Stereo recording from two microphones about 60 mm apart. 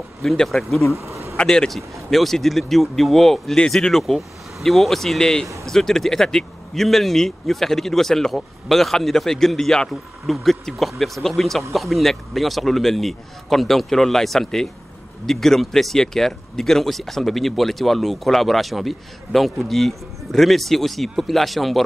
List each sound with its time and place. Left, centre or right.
0.2 s speech: centre
0.9 s bee: right
1.3 s speech: centre